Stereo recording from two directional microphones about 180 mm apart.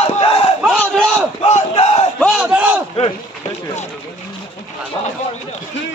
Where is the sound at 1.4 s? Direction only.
35° left (ahead or behind).